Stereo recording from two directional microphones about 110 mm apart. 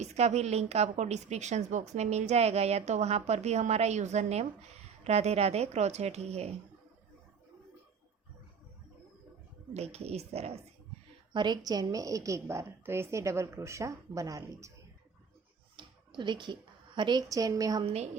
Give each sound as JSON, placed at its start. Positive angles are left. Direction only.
{"t": 0.0, "sound": "a woman's voice", "side_deg": -90}
{"t": 5.0, "sound": "a woman's voice", "side_deg": -75}
{"t": 9.7, "sound": "a woman's voice", "side_deg": -75}
{"t": 11.3, "sound": "a woman's voice", "side_deg": -40}
{"t": 15.7, "sound": "a woman's voice", "side_deg": -45}
{"t": 17.8, "sound": "a woman's voice", "side_deg": -80}